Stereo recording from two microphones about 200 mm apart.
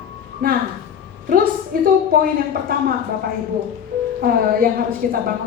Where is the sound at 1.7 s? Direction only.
45° right (ahead or behind).